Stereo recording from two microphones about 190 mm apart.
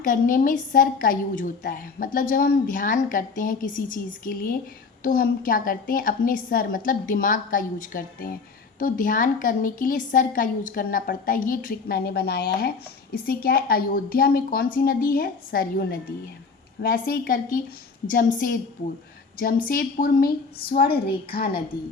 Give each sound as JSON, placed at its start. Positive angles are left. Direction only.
{"t": 0.0, "sound": "a woman's voice", "side_deg": 45}